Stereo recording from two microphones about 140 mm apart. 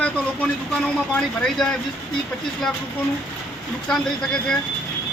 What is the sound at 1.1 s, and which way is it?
Speech, 5° left (ahead or behind).